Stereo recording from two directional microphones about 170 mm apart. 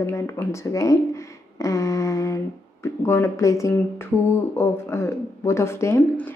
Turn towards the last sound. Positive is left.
turn(degrees=10)  # may be behind; listen again after turning